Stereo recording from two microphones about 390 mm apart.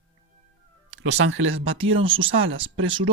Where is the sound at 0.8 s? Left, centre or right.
Right.